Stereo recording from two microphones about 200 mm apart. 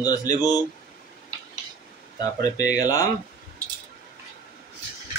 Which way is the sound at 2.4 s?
20° left (ahead or behind).